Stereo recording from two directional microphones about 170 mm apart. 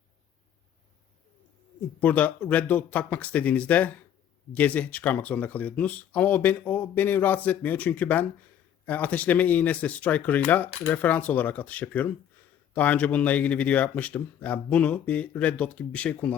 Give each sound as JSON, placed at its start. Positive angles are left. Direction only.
{"t": 2.0, "sound": "speech", "side_deg": 10}